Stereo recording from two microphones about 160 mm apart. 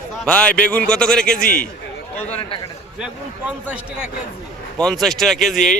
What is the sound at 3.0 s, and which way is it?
A man's voice, 5° right (ahead or behind).